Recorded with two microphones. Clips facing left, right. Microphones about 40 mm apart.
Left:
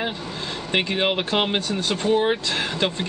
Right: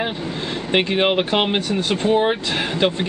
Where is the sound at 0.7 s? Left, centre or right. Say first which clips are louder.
Right 4 dB; centre.